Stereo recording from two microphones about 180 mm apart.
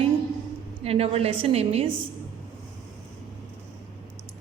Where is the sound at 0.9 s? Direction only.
35° right (ahead or behind).